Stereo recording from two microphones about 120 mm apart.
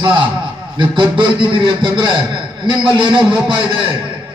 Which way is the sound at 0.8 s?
45° right (ahead or behind).